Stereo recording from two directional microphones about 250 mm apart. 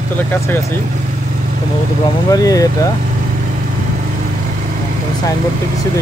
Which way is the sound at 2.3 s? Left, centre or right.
Centre.